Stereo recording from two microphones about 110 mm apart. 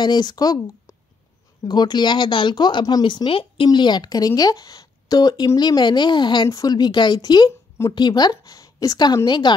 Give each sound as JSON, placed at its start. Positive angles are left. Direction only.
{"t": 0.0, "sound": "speech", "side_deg": 40}
{"t": 3.6, "sound": "a woman's voice", "side_deg": 40}
{"t": 6.4, "sound": "a woman's voice", "side_deg": 30}